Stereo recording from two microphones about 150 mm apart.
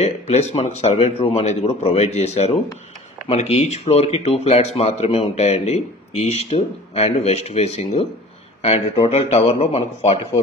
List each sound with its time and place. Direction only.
0.0 s speech: 45° left (ahead or behind)
9.1 s speech: 45° left (ahead or behind)